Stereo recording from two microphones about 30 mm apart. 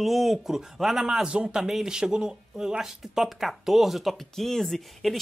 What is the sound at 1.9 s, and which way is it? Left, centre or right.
Speech, right.